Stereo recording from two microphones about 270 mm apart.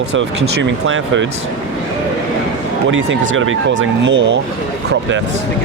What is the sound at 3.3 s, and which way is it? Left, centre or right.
Speech, right.